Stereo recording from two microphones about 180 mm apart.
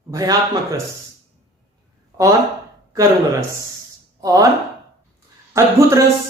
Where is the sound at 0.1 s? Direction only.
20° right (ahead or behind).